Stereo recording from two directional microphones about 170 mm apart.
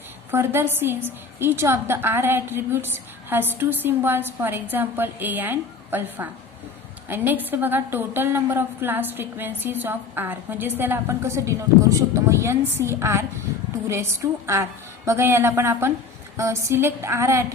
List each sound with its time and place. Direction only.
0.3 s a woman's voice: 15° right (ahead or behind)